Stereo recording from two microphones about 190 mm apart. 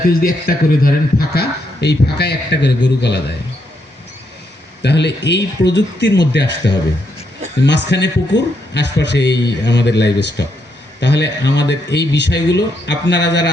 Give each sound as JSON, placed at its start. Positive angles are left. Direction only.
{"t": 0.1, "sound": "speech", "side_deg": 50}
{"t": 4.8, "sound": "speech", "side_deg": 65}